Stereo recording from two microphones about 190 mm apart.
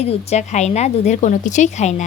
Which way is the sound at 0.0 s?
35° left (ahead or behind).